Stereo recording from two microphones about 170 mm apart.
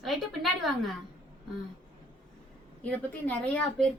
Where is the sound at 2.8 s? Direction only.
10° left (ahead or behind).